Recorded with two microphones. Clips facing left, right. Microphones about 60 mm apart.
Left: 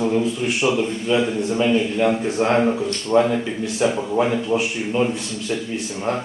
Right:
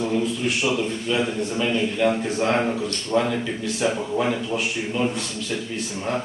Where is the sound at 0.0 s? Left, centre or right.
Centre.